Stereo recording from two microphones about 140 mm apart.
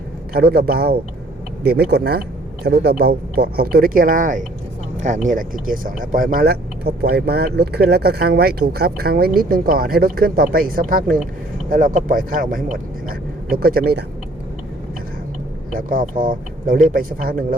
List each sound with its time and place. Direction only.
0.3 s speech: 90° right
11.7 s speech: 75° right (ahead or behind)
15.7 s speech: 85° right